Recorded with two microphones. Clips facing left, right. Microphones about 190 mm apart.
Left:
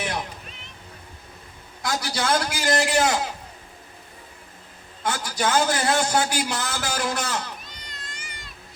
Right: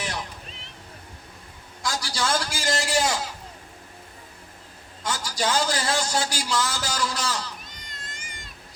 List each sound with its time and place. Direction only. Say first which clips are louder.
0.0 s a sound: left 4 dB; 55° left (ahead or behind)
1.8 s a man's voice: left 2 dB; 60° left (ahead or behind)
5.0 s a man's voice: left 2 dB; 60° left (ahead or behind)
7.7 s cat: left 1 dB; 45° right (ahead or behind)